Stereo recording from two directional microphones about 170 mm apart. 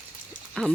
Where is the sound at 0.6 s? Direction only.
5° left (ahead or behind).